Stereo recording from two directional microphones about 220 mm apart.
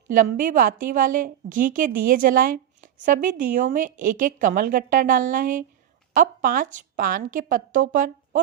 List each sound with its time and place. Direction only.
0.1 s a woman's voice: 35° right (ahead or behind)